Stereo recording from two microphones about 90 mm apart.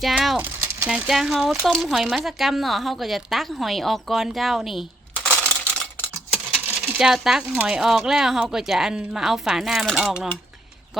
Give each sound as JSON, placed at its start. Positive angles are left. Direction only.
{"t": 0.0, "sound": "speech", "side_deg": 0}
{"t": 0.3, "sound": "a sound", "side_deg": -25}
{"t": 0.9, "sound": "speech", "side_deg": -5}
{"t": 5.4, "sound": "coin", "side_deg": 10}
{"t": 6.3, "sound": "coin", "side_deg": -15}
{"t": 7.6, "sound": "speech", "side_deg": -10}